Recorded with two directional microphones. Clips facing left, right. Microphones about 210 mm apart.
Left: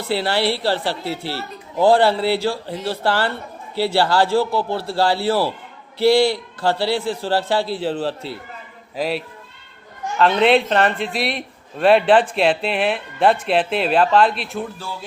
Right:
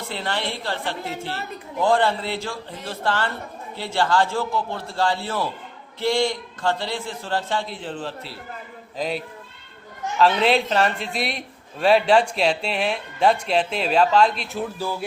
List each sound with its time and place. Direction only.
0.0 s a man's voice: 35° left (ahead or behind)
9.0 s a man's voice: 5° left (ahead or behind)